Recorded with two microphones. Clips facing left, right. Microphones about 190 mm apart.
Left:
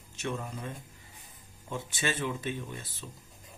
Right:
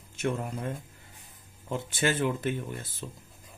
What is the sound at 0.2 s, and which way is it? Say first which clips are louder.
Speech: right 5 dB; 55° right (ahead or behind).